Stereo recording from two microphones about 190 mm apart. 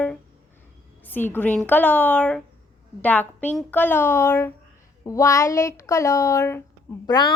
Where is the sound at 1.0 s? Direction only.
10° left (ahead or behind).